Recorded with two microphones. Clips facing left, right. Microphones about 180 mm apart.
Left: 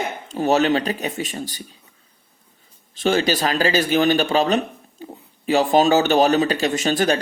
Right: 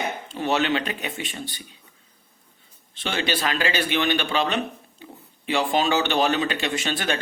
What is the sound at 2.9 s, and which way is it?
Speech, 40° left (ahead or behind).